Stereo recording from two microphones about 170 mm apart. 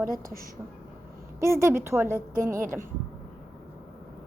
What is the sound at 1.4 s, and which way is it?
A woman's voice, 15° right (ahead or behind).